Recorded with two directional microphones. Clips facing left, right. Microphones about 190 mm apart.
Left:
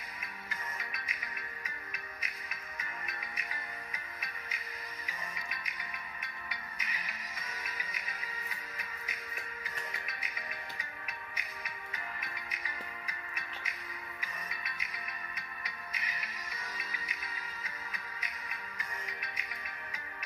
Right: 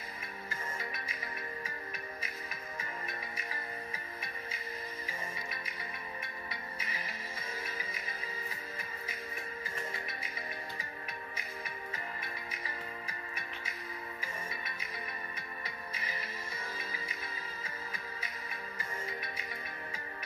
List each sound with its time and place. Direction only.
0.2 s music: 30° right (ahead or behind)
2.8 s music: 30° right (ahead or behind)
10.8 s music: 30° right (ahead or behind)